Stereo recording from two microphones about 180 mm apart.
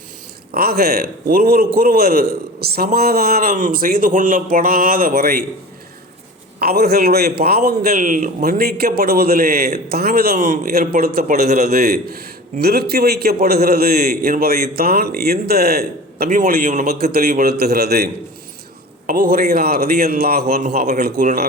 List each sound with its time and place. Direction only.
0.5 s a man's voice: 60° right (ahead or behind)
6.6 s a man's voice: 60° right (ahead or behind)